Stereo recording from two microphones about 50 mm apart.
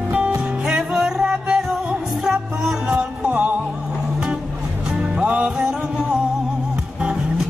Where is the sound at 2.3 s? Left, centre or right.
Centre.